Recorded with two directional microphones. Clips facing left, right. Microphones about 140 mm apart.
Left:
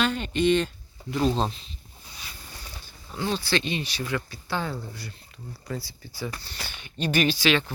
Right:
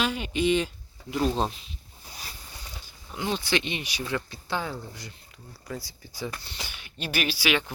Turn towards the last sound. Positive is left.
turn(degrees=-10)  # may be behind; listen again after turning